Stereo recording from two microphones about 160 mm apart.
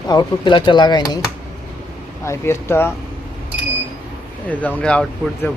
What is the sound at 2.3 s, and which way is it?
Speech, 15° left (ahead or behind).